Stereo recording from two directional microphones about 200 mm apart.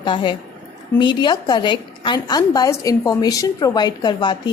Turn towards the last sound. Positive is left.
turn(degrees=20)  # may be behind; listen again after turning